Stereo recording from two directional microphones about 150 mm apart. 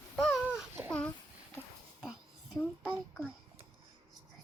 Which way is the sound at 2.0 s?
5° right (ahead or behind).